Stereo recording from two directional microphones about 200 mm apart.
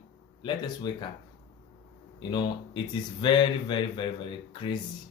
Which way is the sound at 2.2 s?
20° left (ahead or behind).